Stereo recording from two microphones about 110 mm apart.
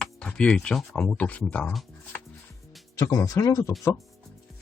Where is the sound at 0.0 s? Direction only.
5° left (ahead or behind).